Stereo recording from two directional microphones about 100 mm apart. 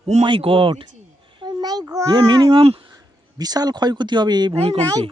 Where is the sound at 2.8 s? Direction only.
40° right (ahead or behind).